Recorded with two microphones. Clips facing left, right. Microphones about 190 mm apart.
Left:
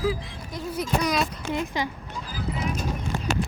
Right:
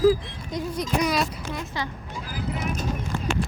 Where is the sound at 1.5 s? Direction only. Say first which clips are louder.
Left 4 dB; 20° left (ahead or behind).